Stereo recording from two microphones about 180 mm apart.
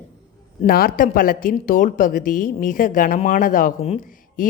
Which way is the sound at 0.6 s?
55° left (ahead or behind).